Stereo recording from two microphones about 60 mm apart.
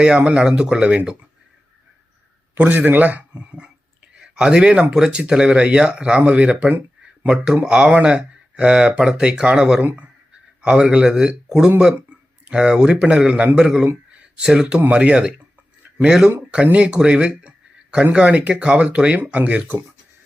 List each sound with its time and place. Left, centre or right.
0.2 s speech: right
2.6 s speech: right
3.3 s speech: centre
13.8 s a sound: right
14.4 s speech: centre
16.7 s speech: centre